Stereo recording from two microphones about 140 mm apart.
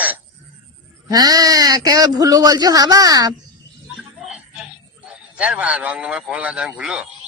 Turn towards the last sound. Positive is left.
turn(degrees=-5)  # may be behind; listen again after turning